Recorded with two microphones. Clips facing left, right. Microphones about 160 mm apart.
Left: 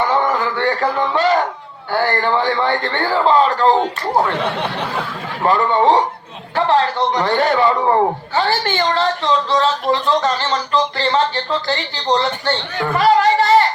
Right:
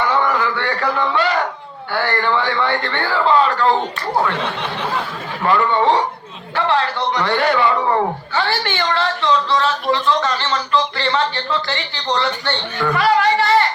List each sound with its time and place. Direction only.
0.2 s a sound: 35° left (ahead or behind)
0.9 s a man's voice: 40° left (ahead or behind)
5.5 s a man's voice: 35° left (ahead or behind)
8.8 s a man's voice: 40° left (ahead or behind)